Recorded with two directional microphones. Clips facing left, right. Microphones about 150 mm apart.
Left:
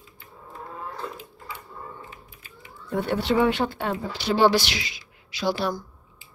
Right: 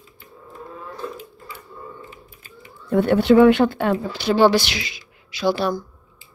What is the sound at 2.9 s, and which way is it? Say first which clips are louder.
Speech: right 9 dB; 55° right (ahead or behind).